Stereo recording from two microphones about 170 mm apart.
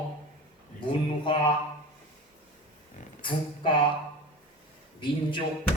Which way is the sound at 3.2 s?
30° left (ahead or behind).